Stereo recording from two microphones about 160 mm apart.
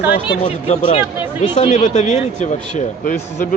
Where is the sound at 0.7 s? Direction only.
45° left (ahead or behind).